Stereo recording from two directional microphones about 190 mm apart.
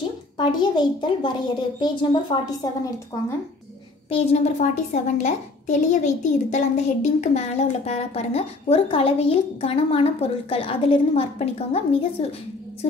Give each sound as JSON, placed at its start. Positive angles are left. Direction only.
{"t": 0.4, "sound": "a woman's voice", "side_deg": 25}
{"t": 4.1, "sound": "a woman's voice", "side_deg": 30}